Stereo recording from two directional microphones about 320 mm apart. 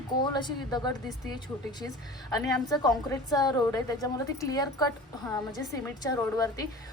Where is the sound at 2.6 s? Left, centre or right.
Centre.